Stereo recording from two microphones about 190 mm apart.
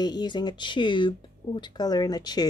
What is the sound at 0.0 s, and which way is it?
Speech, 20° left (ahead or behind).